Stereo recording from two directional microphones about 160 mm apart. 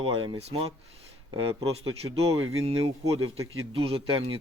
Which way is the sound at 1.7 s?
40° right (ahead or behind).